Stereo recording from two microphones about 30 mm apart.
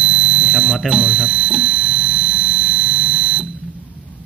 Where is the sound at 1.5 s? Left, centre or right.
Centre.